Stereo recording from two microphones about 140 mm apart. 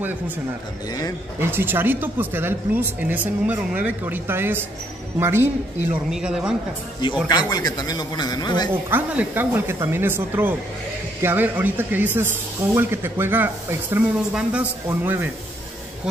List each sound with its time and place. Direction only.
1.4 s a man's voice: 15° right (ahead or behind)
6.0 s speech: 5° right (ahead or behind)
7.2 s speech: 30° left (ahead or behind)
8.9 s a man's voice: 10° right (ahead or behind)